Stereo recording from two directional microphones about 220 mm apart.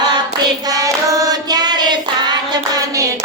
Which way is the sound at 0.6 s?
15° right (ahead or behind).